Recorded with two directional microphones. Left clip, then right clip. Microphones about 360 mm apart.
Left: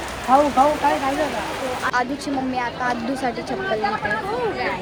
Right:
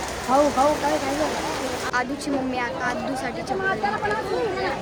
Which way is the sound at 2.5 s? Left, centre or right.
Centre.